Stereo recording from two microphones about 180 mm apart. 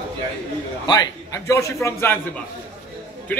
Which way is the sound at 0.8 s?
20° left (ahead or behind).